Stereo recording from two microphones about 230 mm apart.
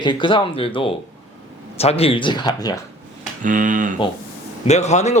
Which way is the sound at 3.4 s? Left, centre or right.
Right.